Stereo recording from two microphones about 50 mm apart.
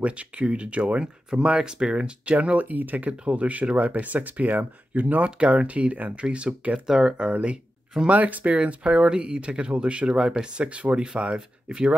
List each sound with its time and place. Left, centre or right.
0.0 s speech: right
8.1 s speech: right